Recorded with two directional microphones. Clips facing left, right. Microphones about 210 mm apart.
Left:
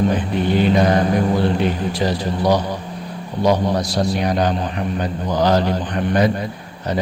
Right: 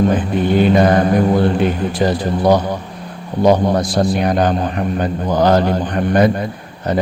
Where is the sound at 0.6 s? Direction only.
50° right (ahead or behind).